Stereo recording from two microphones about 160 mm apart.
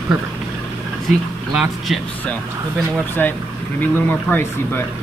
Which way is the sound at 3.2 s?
10° left (ahead or behind).